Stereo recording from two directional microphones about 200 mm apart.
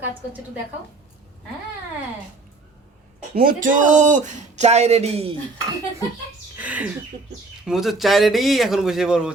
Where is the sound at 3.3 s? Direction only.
45° right (ahead or behind); by 5.4 s 30° right (ahead or behind).